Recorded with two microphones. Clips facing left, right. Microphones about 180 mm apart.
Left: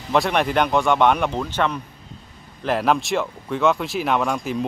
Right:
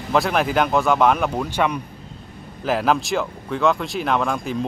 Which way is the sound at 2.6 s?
Centre (ahead or behind).